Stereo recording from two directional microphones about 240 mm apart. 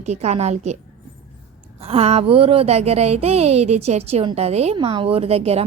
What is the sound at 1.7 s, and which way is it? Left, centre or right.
A woman's voice, right.